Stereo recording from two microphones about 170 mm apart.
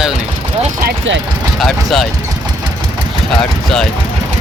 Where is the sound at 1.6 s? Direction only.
Centre (ahead or behind).